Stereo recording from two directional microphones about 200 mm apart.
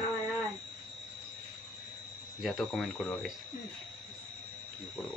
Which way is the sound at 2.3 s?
Centre (ahead or behind).